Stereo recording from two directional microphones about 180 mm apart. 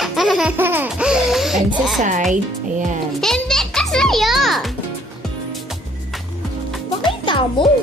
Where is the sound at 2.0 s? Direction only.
45° right (ahead or behind).